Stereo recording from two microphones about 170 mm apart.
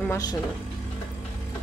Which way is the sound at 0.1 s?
20° left (ahead or behind).